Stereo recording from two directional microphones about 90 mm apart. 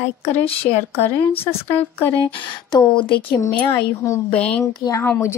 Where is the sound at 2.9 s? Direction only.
65° left (ahead or behind).